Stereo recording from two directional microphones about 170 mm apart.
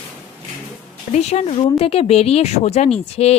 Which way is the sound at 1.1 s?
40° left (ahead or behind).